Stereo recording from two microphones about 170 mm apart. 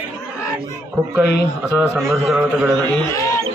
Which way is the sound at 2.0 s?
5° right (ahead or behind).